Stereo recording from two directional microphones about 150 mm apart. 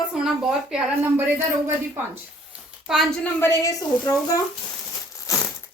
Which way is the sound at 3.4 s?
20° left (ahead or behind).